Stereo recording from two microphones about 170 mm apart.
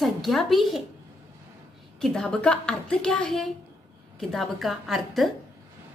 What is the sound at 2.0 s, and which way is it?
A woman's voice, 5° left (ahead or behind).